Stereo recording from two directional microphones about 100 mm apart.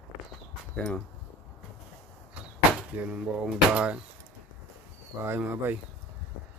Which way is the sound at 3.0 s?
10° right (ahead or behind).